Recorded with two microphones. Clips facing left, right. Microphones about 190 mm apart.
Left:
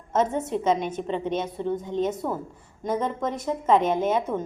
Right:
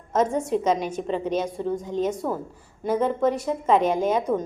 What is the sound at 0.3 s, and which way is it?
Speech, 10° right (ahead or behind).